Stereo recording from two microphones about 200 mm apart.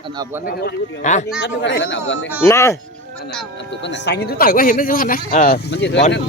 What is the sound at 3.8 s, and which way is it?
Speech, 60° left (ahead or behind).